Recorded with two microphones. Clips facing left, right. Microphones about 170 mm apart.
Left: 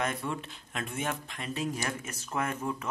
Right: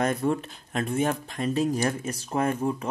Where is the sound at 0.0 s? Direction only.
40° right (ahead or behind).